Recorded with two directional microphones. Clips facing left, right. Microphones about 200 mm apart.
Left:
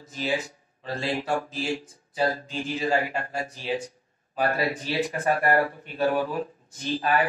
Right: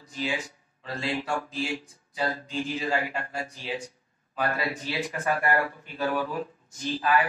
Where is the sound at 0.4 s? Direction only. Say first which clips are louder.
Left 2 dB; 35° left (ahead or behind).